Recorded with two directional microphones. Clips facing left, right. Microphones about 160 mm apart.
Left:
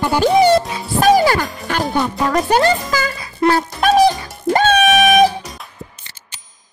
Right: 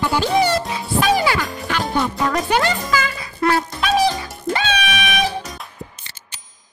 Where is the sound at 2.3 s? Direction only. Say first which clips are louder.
Left 5 dB; 40° left (ahead or behind).